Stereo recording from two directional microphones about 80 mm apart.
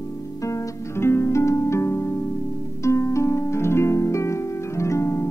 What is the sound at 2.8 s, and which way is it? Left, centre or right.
Harp, left.